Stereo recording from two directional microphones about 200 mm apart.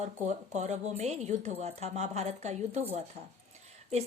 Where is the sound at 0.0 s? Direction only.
35° right (ahead or behind).